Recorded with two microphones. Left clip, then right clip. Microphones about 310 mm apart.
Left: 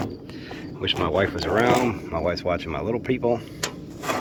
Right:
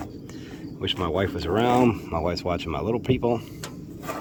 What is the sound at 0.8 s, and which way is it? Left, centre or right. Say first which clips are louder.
Speech: left 3 dB; centre.